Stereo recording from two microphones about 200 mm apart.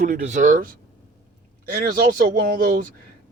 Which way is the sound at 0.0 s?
40° right (ahead or behind).